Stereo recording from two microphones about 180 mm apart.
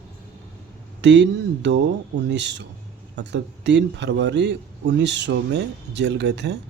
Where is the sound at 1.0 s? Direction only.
80° right.